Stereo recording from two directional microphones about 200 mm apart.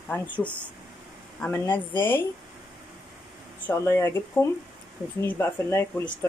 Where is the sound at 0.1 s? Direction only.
5° left (ahead or behind).